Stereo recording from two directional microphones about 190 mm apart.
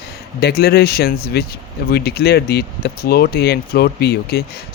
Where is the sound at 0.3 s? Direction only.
55° left (ahead or behind).